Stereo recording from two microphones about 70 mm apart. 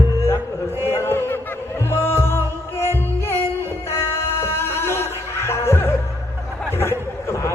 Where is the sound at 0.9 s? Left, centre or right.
Left.